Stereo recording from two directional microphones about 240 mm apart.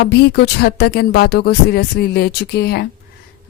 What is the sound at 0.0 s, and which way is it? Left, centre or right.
A woman's voice, left.